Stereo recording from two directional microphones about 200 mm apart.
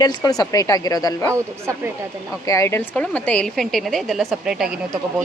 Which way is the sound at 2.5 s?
15° left (ahead or behind).